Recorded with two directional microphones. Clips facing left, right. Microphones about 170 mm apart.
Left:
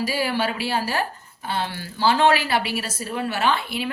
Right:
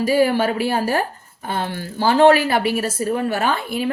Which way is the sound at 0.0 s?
45° right (ahead or behind).